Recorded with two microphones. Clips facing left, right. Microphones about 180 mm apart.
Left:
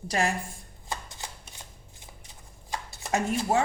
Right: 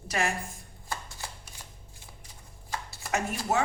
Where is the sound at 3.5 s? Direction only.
30° left (ahead or behind).